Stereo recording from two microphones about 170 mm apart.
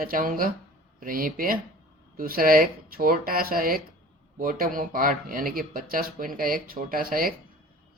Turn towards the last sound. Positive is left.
turn(degrees=-60)  # may be behind; listen again after turning